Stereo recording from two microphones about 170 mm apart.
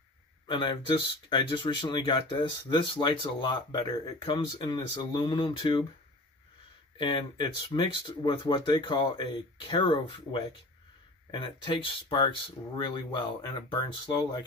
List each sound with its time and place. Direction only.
0.5 s speech: 30° left (ahead or behind)
7.0 s speech: 30° left (ahead or behind)